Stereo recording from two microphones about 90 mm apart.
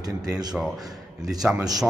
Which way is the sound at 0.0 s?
45° right (ahead or behind).